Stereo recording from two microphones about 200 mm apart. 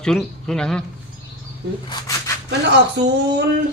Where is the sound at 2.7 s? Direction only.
60° right (ahead or behind).